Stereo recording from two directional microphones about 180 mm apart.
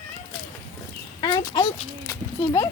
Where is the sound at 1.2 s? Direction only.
20° left (ahead or behind).